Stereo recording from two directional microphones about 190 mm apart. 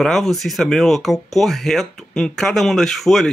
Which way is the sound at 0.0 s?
Centre (ahead or behind).